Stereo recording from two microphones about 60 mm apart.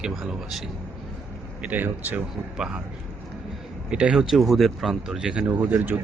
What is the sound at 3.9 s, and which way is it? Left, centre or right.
Speech, centre.